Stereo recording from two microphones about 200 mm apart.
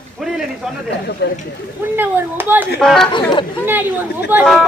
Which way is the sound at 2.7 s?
Centre (ahead or behind).